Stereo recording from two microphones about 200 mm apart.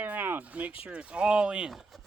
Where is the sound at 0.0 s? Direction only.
10° right (ahead or behind).